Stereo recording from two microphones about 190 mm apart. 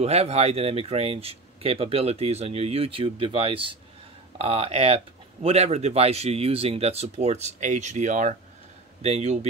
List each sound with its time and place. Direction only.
0.0 s speech: 35° right (ahead or behind)